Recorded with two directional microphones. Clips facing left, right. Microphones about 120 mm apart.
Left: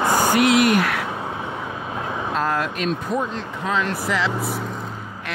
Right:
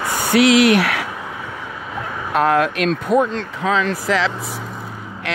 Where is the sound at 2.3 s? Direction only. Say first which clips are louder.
Right 8 dB; 75° right (ahead or behind).